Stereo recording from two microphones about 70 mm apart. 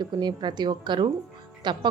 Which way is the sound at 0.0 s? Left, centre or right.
Right.